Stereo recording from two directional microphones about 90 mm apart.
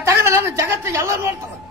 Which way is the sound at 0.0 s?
30° right (ahead or behind).